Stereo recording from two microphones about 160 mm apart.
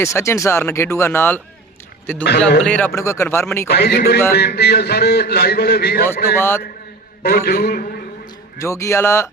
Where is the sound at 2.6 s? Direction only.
10° left (ahead or behind).